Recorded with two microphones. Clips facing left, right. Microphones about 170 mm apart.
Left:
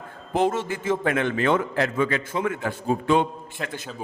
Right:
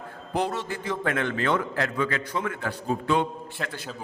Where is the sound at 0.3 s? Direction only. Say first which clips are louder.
Left 5 dB; 20° left (ahead or behind).